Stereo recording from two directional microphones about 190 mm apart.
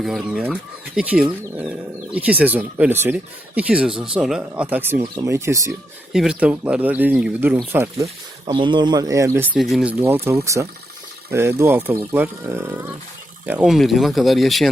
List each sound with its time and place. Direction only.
0.0 s speech: centre (ahead or behind)
8.4 s speech: 25° right (ahead or behind)
9.5 s speech: centre (ahead or behind)
10.0 s speech: 15° right (ahead or behind)